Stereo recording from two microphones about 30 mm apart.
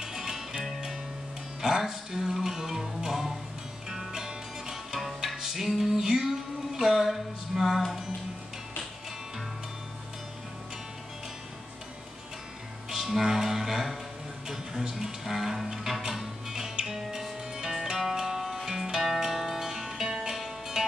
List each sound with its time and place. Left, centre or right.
0.0 s music: centre
5.9 s music: right
6.2 s a sound: centre
12.9 s music: centre